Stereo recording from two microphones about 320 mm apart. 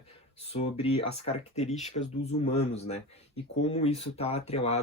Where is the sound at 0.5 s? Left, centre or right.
Centre.